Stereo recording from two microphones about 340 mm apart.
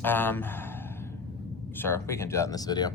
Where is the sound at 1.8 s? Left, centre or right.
Centre.